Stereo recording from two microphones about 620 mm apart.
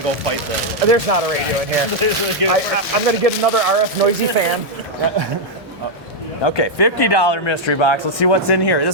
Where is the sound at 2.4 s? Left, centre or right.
Right.